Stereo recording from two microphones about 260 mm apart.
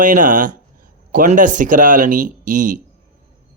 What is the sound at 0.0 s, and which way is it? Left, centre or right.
A man's voice, right.